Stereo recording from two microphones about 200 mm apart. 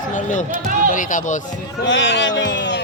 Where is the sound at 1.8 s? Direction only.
65° left (ahead or behind).